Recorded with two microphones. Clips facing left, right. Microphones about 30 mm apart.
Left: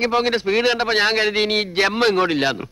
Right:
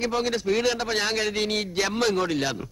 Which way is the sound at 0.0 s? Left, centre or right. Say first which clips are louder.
Left 6 dB; left.